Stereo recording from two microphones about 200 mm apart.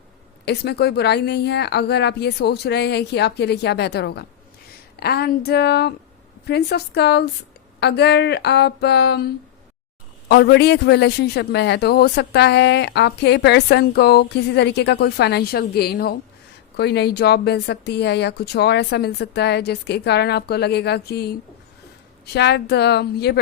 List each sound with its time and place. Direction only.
0.4 s a man's voice: 55° left (ahead or behind)